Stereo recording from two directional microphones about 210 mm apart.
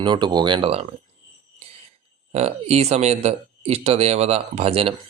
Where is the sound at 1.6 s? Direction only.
30° right (ahead or behind).